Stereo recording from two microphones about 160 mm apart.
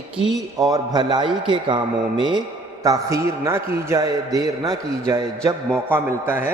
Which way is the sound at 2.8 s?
20° right (ahead or behind).